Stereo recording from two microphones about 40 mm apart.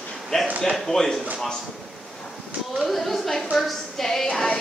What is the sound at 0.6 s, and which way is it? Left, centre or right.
Speech, centre.